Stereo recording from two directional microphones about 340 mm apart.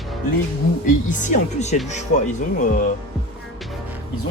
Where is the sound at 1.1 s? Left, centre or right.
Left.